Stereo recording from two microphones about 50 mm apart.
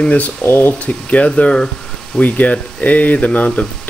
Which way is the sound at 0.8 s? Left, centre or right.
Left.